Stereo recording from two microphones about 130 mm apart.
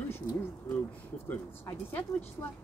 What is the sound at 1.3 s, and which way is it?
Speech, 15° left (ahead or behind).